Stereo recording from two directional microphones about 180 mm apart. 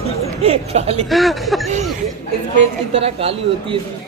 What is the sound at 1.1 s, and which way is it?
Speech, centre (ahead or behind).